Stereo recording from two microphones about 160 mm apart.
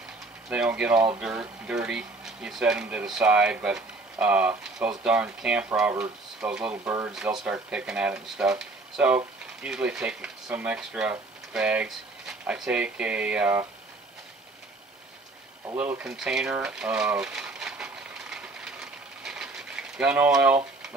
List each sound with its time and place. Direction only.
0.5 s speech: 5° right (ahead or behind)
7.1 s speech: 5° right (ahead or behind)
15.6 s speech: 15° right (ahead or behind)
16.0 s a sound: 5° right (ahead or behind)